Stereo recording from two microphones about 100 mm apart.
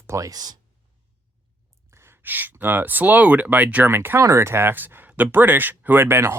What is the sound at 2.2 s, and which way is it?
Speech, 20° right (ahead or behind).